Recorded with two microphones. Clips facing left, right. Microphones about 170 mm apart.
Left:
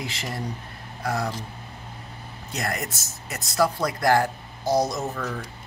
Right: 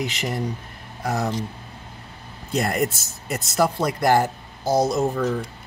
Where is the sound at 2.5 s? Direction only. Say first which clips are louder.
Right 8 dB; 30° right (ahead or behind).